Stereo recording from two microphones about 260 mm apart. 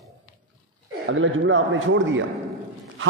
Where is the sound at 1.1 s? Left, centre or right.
Right.